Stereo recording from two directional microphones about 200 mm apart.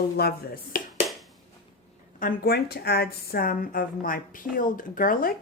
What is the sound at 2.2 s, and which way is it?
A woman's voice, 45° left (ahead or behind).